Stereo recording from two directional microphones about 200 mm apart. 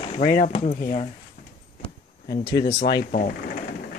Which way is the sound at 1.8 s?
20° left (ahead or behind).